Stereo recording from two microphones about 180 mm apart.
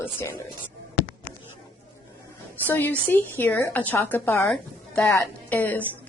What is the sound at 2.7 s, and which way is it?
A woman's voice, 10° left (ahead or behind).